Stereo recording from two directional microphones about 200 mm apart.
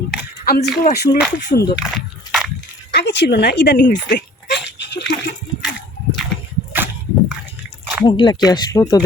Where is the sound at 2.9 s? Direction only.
60° left (ahead or behind).